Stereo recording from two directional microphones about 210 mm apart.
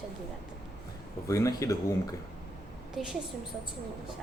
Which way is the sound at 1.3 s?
15° left (ahead or behind).